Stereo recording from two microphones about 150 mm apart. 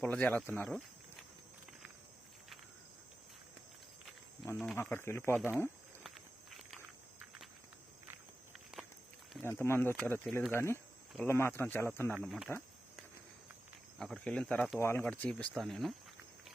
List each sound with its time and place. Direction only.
0.0 s speech: 10° left (ahead or behind)
4.5 s speech: 5° left (ahead or behind)
4.8 s speech: 15° left (ahead or behind)
6.0 s walk: centre (ahead or behind)
9.4 s speech: 15° left (ahead or behind)
12.2 s speech: centre (ahead or behind)
14.0 s speech: 5° left (ahead or behind)